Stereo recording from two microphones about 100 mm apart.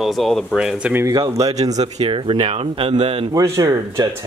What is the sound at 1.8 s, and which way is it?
A man's voice, 75° right (ahead or behind).